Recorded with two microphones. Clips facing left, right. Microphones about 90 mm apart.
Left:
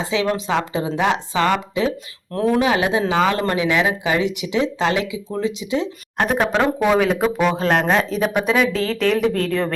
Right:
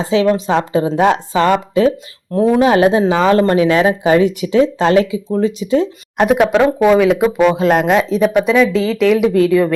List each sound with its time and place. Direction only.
0.0 s speech: 35° right (ahead or behind)
2.3 s speech: 20° right (ahead or behind)
2.6 s speech: 40° right (ahead or behind)
6.1 s speech: 10° right (ahead or behind)
6.8 s speech: centre (ahead or behind)